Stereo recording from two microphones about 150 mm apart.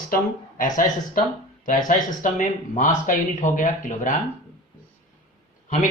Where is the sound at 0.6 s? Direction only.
65° left (ahead or behind).